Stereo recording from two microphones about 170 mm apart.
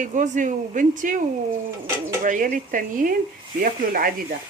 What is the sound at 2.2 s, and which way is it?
Speech, 50° right (ahead or behind).